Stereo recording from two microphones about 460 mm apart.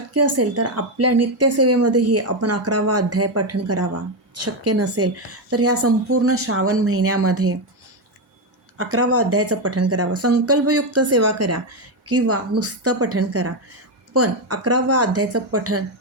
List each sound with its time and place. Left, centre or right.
0.1 s speech: right
8.8 s a woman's voice: right